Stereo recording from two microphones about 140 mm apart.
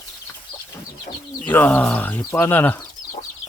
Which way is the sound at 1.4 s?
10° left (ahead or behind).